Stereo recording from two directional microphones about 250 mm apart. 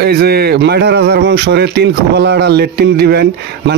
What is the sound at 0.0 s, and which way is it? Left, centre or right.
Speech, right.